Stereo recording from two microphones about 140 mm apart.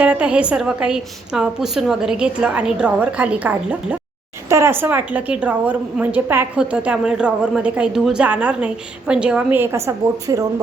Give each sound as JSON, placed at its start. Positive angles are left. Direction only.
{"t": 0.0, "sound": "a woman's voice", "side_deg": -10}